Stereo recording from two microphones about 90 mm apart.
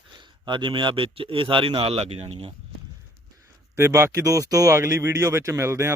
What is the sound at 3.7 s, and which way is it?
Speech, 30° right (ahead or behind).